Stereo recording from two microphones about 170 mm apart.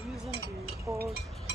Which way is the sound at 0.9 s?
65° right (ahead or behind).